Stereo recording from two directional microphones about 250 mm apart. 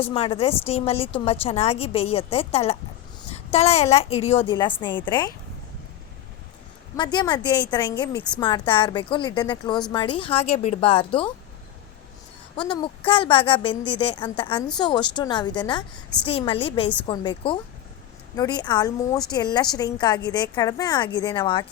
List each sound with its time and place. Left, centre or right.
0.0 s a woman's voice: left
6.9 s a woman's voice: centre
12.5 s a woman's voice: centre